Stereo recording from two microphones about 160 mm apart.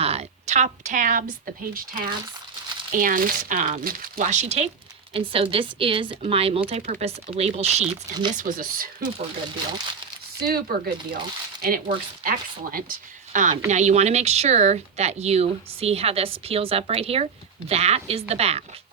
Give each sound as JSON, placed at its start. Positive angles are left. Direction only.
{"t": 0.0, "sound": "speech", "side_deg": -40}
{"t": 8.1, "sound": "speech", "side_deg": -25}
{"t": 8.4, "sound": "speech", "side_deg": -60}
{"t": 10.4, "sound": "speech", "side_deg": -65}